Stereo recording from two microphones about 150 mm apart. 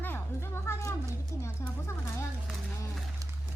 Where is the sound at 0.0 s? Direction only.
15° left (ahead or behind).